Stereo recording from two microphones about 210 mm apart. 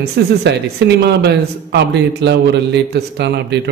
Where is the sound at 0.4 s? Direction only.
55° right (ahead or behind).